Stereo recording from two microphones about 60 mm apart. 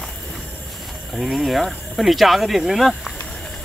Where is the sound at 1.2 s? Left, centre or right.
Centre.